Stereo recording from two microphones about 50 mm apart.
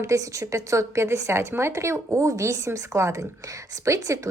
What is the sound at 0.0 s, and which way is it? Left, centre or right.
A woman's voice, right.